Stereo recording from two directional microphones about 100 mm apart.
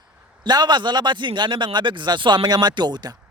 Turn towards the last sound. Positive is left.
turn(degrees=-45)  # may be behind; listen again after turning